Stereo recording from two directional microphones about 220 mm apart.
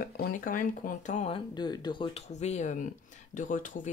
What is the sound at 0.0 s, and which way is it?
Speech, 40° left (ahead or behind).